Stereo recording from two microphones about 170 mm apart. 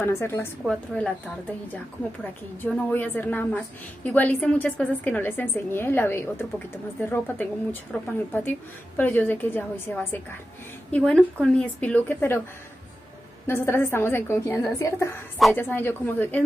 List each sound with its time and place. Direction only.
0.0 s a woman's voice: 15° left (ahead or behind)
2.6 s a woman's voice: 10° left (ahead or behind)
13.5 s a woman's voice: 15° left (ahead or behind)